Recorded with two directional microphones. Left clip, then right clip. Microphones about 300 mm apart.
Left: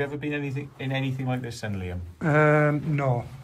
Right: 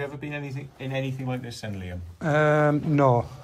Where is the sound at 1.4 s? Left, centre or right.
Centre.